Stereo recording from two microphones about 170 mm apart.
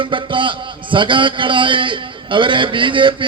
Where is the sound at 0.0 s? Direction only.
30° right (ahead or behind).